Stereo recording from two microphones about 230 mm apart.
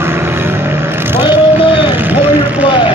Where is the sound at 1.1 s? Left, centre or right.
Centre.